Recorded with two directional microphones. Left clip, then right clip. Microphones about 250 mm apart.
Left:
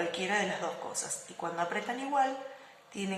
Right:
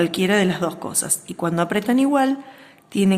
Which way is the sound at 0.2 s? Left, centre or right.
Right.